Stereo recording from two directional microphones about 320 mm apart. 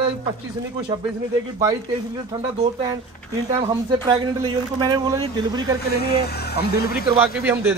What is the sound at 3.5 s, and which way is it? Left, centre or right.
Speech, centre.